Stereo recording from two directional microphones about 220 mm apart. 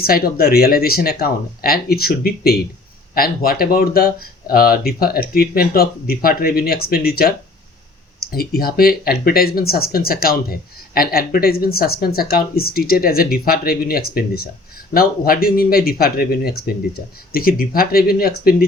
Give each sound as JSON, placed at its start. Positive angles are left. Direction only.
{"t": 0.0, "sound": "speech", "side_deg": 45}